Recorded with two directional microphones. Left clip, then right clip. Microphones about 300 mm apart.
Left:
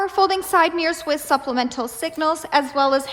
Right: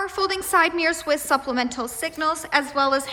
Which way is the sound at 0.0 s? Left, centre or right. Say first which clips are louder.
Left 6 dB; centre.